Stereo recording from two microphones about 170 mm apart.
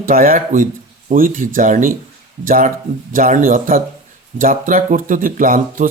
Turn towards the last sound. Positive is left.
turn(degrees=-55)  # may be behind; listen again after turning